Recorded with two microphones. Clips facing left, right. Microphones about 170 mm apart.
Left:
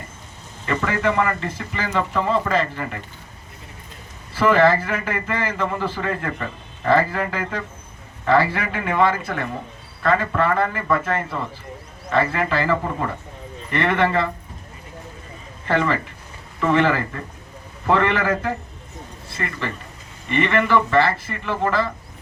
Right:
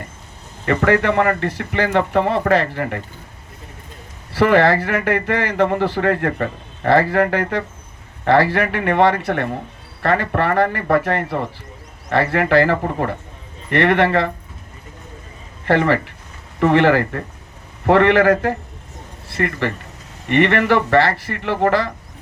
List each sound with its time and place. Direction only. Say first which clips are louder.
0.6 s speech: right 6 dB; 60° right (ahead or behind)
4.3 s speech: right 2 dB; 70° right (ahead or behind)
15.6 s speech: right 5 dB; 65° right (ahead or behind)